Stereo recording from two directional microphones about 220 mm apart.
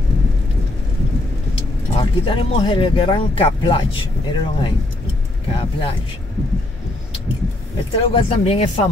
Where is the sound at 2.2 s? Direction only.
20° left (ahead or behind).